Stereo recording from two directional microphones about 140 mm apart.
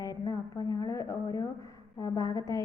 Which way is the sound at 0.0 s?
25° left (ahead or behind).